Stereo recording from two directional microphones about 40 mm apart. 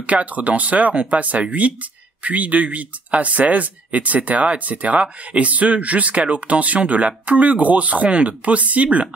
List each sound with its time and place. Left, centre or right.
0.0 s speech: right
8.1 s speech: right